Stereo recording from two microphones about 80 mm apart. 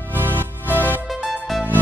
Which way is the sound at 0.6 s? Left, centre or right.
Left.